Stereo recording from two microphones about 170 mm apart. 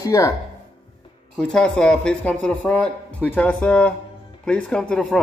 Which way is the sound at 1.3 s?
5° left (ahead or behind).